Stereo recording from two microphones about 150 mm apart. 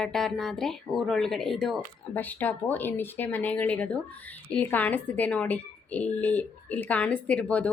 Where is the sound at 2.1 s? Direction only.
10° left (ahead or behind).